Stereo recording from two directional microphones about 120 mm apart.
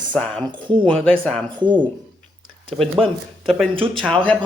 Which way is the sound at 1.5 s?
40° right (ahead or behind).